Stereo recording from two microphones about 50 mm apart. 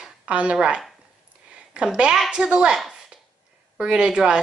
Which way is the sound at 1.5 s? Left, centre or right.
Right.